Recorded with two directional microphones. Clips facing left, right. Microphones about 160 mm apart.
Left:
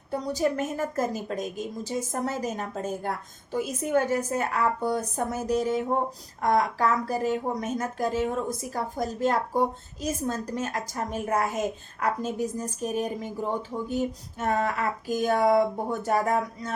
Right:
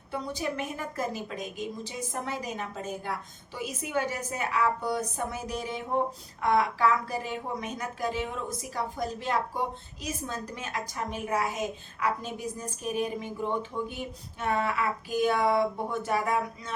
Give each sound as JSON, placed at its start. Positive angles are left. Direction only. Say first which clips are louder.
{"t": 0.1, "sound": "a woman's voice", "louder": "left 6 dB", "side_deg": 40}